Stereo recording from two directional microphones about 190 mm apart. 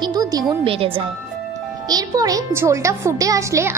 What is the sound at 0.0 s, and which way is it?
A child's voice, 20° right (ahead or behind).